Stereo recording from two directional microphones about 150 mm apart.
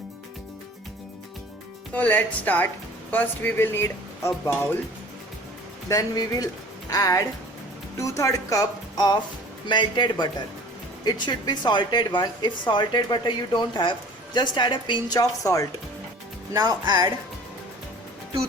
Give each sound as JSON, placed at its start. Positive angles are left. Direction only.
{"t": 2.0, "sound": "speech", "side_deg": 10}
{"t": 5.9, "sound": "a woman's voice", "side_deg": 25}
{"t": 16.5, "sound": "speech", "side_deg": -20}